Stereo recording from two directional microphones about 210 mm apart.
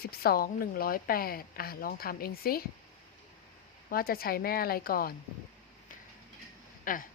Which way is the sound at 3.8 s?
45° left (ahead or behind).